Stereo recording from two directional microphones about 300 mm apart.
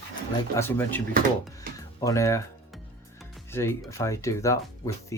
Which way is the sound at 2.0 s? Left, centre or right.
Centre.